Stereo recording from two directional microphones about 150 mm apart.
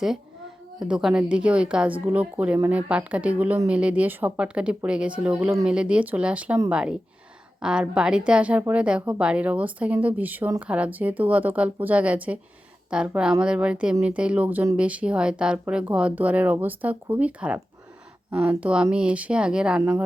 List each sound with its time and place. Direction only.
0.8 s a woman's voice: 5° right (ahead or behind)
19.8 s a woman's voice: 15° right (ahead or behind)